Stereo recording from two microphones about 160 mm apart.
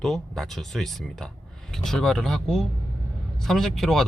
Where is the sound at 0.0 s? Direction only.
Centre (ahead or behind).